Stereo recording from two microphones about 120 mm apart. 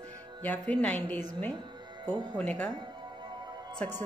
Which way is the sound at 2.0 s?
35° right (ahead or behind).